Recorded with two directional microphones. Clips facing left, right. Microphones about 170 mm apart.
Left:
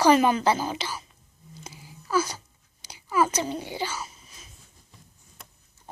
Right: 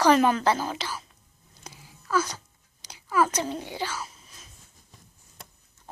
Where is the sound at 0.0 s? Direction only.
5° left (ahead or behind).